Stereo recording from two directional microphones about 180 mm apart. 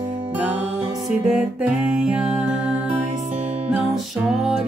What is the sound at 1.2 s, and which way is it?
Music, 5° right (ahead or behind).